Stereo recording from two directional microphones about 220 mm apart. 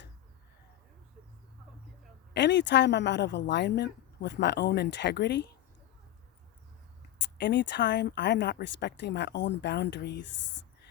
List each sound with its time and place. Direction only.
2.3 s speech: 50° left (ahead or behind)
7.2 s speech: 50° left (ahead or behind)